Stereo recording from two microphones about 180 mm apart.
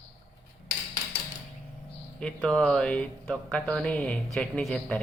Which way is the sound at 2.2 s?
5° left (ahead or behind).